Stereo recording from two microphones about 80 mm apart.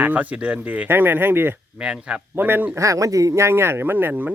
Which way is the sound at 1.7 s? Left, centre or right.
Centre.